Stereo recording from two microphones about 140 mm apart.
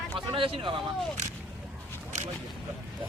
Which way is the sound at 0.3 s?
40° right (ahead or behind).